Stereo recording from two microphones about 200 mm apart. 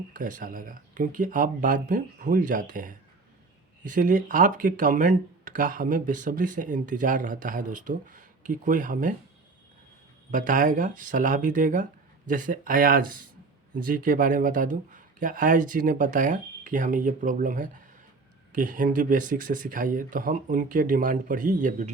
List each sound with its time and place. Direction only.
0.1 s speech: 40° right (ahead or behind)
10.3 s speech: 40° right (ahead or behind)